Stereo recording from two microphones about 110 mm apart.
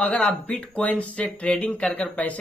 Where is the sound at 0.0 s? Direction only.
10° left (ahead or behind).